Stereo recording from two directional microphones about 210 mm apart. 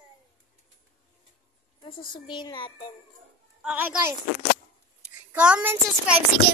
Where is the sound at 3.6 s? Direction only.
5° right (ahead or behind).